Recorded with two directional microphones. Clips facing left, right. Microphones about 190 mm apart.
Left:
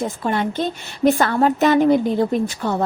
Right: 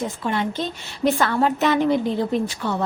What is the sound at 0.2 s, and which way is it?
A woman's voice, 45° left (ahead or behind).